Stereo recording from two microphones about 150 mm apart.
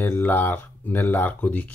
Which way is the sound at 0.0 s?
15° left (ahead or behind).